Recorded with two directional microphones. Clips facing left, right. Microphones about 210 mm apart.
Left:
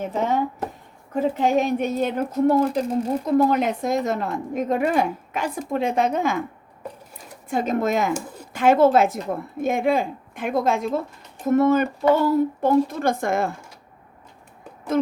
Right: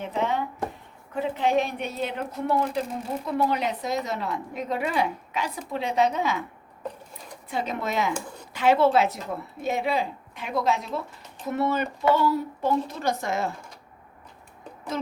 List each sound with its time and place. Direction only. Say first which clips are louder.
0.0 s a woman's voice: left 4 dB; 45° left (ahead or behind)
7.5 s a woman's voice: left 7 dB; 45° left (ahead or behind)
14.9 s a woman's voice: left 10 dB; 50° left (ahead or behind)